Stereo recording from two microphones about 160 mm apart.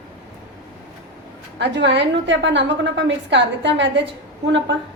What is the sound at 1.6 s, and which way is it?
A woman's voice, 90° right.